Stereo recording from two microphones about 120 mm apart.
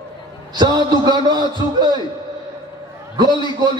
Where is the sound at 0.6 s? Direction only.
35° right (ahead or behind).